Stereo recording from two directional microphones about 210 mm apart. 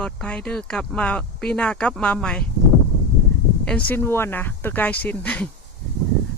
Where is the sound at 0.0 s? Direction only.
5° left (ahead or behind).